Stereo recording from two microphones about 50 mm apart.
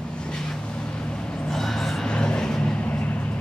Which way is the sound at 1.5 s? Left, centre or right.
Centre.